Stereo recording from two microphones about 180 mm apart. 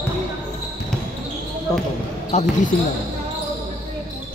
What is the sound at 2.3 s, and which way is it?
Speech, 35° left (ahead or behind).